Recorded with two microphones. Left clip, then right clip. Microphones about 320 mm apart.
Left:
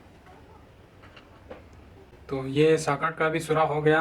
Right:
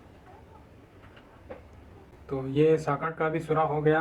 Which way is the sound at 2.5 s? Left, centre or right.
Centre.